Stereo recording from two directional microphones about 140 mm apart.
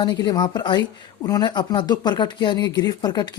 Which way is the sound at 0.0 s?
30° left (ahead or behind).